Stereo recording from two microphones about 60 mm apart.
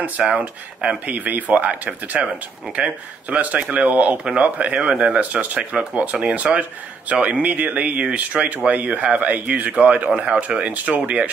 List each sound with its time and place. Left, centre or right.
0.4 s speech: right
2.2 s speech: centre
2.7 s speech: right